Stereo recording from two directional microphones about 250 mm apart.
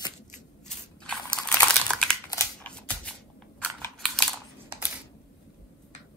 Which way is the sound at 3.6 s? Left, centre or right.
Centre.